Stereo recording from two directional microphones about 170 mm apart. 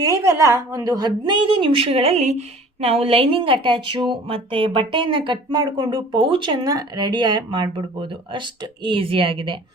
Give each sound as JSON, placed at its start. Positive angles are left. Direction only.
{"t": 0.0, "sound": "a woman's voice", "side_deg": -20}